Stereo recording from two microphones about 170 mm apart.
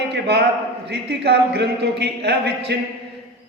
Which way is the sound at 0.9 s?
75° right (ahead or behind).